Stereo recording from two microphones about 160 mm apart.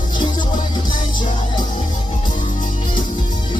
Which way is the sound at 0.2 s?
30° left (ahead or behind).